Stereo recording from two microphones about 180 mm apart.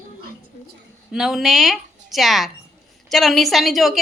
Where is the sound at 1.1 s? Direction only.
Centre (ahead or behind).